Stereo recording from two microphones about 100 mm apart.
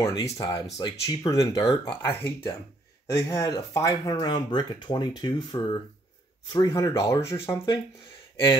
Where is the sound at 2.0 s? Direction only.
20° left (ahead or behind).